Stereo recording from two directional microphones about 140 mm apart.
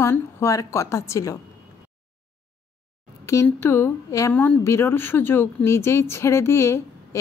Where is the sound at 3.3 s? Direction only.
20° left (ahead or behind).